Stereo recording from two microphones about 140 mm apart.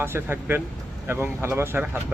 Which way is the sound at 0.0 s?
15° right (ahead or behind).